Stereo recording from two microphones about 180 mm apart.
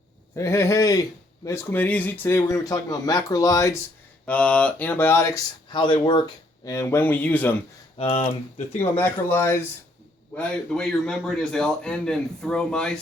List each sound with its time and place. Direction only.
0.3 s speech: 15° left (ahead or behind)
4.3 s speech: 5° left (ahead or behind)
7.9 s speech: 35° left (ahead or behind)
8.8 s a man's voice: 10° left (ahead or behind)